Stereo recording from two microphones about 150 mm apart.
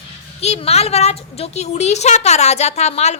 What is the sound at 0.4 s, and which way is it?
A woman's voice, 45° left (ahead or behind).